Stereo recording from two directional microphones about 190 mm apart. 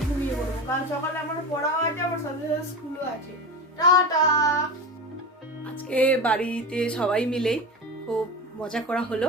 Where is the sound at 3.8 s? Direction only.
20° left (ahead or behind).